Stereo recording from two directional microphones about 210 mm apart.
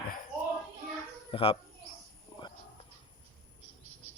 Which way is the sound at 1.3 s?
25° left (ahead or behind).